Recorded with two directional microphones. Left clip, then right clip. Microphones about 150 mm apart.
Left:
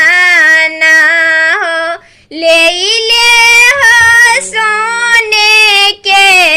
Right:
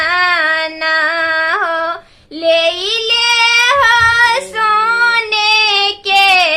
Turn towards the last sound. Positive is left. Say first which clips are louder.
# left 5 dB
turn(degrees=20)  # may be behind; listen again after turning